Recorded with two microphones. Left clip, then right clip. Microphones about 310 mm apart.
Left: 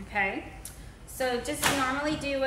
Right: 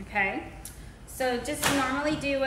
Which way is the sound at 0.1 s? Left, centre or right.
Centre.